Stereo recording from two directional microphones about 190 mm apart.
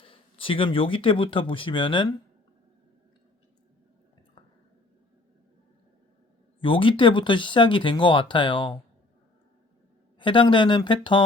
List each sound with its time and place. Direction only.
0.0 s speech: 30° left (ahead or behind)
6.6 s speech: 25° left (ahead or behind)
10.2 s speech: 25° left (ahead or behind)